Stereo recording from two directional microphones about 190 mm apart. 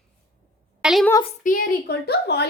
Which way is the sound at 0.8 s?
Centre (ahead or behind).